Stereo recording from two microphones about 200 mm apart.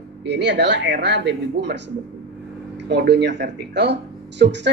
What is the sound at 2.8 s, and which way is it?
Speech, 60° right (ahead or behind).